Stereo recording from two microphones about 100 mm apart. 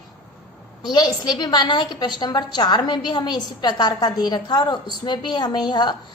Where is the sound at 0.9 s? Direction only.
45° left (ahead or behind).